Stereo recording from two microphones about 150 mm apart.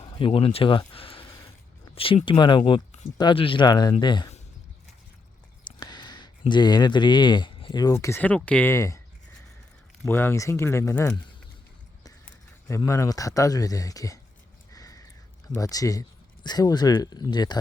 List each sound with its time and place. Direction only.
0.0 s speech: 35° left (ahead or behind)
0.9 s a sound: 35° left (ahead or behind)
2.0 s speech: 35° left (ahead or behind)
5.6 s a sound: 30° left (ahead or behind)
6.5 s speech: 30° left (ahead or behind)
7.9 s speech: 15° left (ahead or behind)
10.0 s speech: 15° left (ahead or behind)
12.2 s speech: 20° left (ahead or behind)
14.7 s a sound: 25° left (ahead or behind)
15.5 s speech: 25° left (ahead or behind)